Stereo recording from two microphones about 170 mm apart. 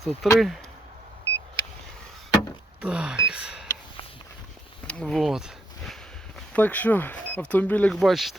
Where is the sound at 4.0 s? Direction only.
35° left (ahead or behind).